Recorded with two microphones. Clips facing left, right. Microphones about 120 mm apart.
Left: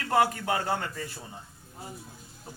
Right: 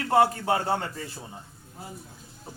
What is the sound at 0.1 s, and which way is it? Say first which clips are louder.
Speech: right 3 dB; 30° right (ahead or behind).